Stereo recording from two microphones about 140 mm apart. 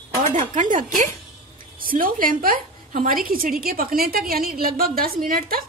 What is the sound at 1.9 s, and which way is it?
A woman's voice, 85° right.